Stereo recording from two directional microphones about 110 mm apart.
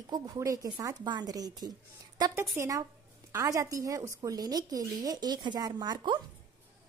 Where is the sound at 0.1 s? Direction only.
35° right (ahead or behind).